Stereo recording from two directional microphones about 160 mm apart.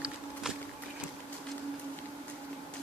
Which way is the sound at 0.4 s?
5° right (ahead or behind).